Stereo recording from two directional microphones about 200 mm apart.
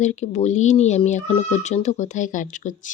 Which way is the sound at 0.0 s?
35° left (ahead or behind).